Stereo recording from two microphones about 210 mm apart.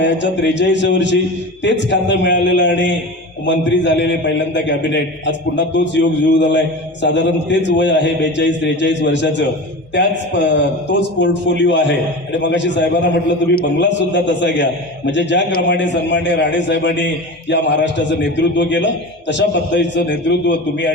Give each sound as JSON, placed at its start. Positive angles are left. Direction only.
{"t": 0.0, "sound": "a man's voice", "side_deg": 55}